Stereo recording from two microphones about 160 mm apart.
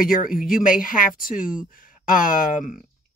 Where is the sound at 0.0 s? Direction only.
60° left (ahead or behind).